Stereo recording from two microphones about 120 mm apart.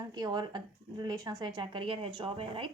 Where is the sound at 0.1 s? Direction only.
35° right (ahead or behind).